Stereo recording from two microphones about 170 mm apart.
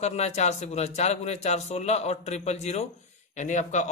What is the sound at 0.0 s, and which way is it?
Speech, 40° left (ahead or behind).